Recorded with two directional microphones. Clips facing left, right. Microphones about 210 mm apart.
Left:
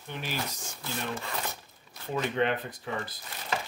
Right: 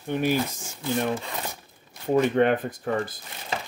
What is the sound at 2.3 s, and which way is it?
Speech, 50° right (ahead or behind).